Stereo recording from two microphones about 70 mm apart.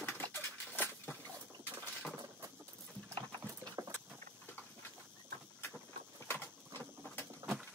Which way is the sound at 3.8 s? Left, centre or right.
Right.